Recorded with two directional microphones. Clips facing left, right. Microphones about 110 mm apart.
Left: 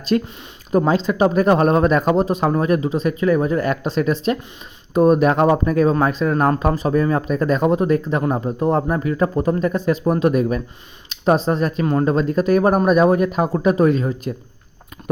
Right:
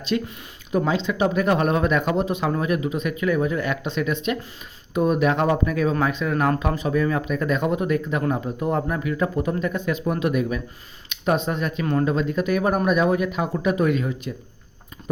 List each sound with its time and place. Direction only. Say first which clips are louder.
0.1 s speech: left 6 dB; 45° left (ahead or behind)